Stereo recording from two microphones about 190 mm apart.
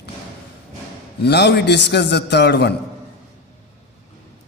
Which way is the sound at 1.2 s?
60° left (ahead or behind).